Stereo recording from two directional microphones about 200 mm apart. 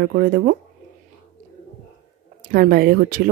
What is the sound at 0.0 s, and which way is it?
Speech, 45° right (ahead or behind).